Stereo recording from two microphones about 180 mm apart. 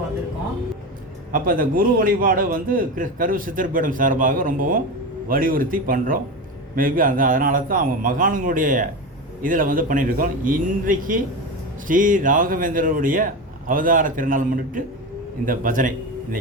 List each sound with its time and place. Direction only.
1.3 s a man's voice: 50° right (ahead or behind)